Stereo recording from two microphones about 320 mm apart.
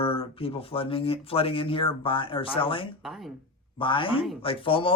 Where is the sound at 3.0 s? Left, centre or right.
Centre.